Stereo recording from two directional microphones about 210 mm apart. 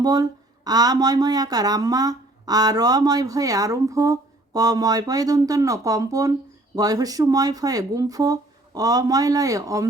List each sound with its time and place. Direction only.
0.0 s speech: 20° right (ahead or behind)